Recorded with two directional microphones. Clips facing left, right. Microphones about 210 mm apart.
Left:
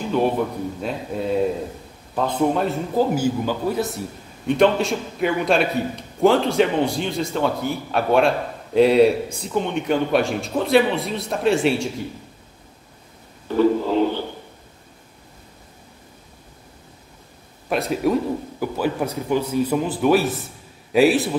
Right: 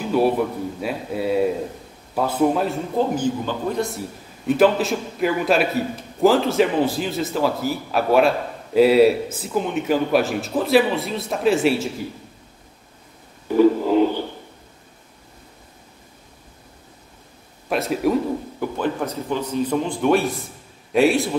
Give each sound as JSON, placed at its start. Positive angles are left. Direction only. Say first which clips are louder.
{"t": 0.7, "sound": "a man's voice", "louder": "right 1 dB", "side_deg": -5}
{"t": 13.5, "sound": "a sound", "louder": "right 2 dB", "side_deg": -10}
{"t": 17.6, "sound": "a man's voice", "louder": "even", "side_deg": 0}